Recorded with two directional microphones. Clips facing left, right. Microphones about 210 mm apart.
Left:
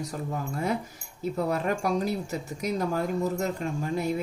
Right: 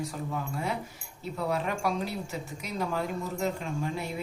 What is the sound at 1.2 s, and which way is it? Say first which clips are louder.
Speech: left 3 dB; 45° left (ahead or behind).